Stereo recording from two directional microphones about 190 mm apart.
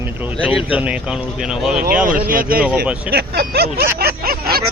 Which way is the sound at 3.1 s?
55° right (ahead or behind).